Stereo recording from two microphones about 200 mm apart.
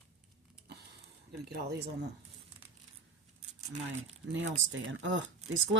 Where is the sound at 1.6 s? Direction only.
55° right (ahead or behind).